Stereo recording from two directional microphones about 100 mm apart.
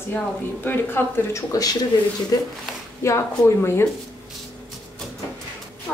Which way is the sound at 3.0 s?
30° left (ahead or behind).